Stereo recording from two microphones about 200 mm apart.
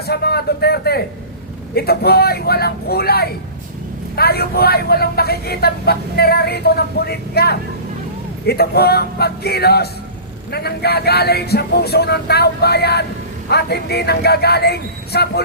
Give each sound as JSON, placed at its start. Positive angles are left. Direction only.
{"t": 0.0, "sound": "a man's voice", "side_deg": 50}